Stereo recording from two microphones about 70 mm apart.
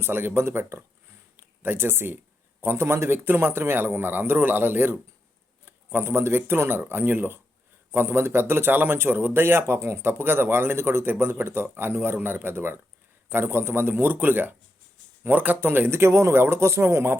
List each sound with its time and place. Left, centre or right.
0.0 s a man's voice: right